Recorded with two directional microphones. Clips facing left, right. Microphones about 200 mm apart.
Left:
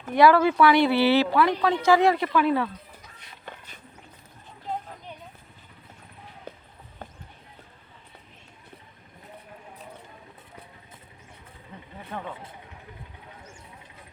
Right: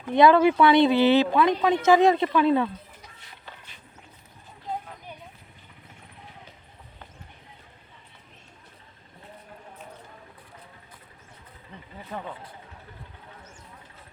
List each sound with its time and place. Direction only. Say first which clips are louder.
0.1 s speech: right 1 dB; 20° right (ahead or behind)
6.5 s clip-clop: left 10 dB; 55° left (ahead or behind)